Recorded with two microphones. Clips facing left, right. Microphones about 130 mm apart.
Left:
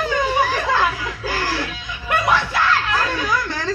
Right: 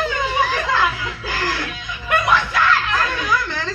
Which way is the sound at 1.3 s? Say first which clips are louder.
Even; 35° left (ahead or behind).